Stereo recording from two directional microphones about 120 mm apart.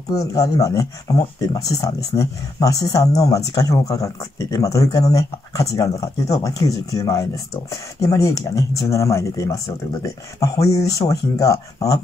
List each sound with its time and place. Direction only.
0.1 s speech: 30° left (ahead or behind)